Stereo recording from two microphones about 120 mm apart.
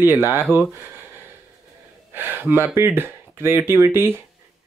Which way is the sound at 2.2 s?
15° right (ahead or behind).